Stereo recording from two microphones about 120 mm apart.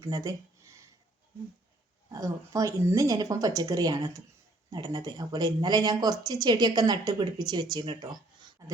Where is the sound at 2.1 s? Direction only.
30° right (ahead or behind).